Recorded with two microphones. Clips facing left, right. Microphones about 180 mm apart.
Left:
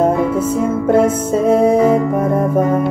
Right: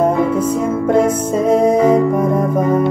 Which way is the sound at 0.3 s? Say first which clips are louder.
Even; 10° left (ahead or behind).